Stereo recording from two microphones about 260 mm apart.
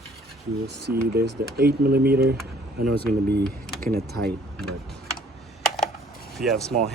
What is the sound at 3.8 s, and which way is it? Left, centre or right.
Speech, right.